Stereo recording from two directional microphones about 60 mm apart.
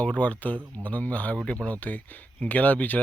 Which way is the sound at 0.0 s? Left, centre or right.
Left.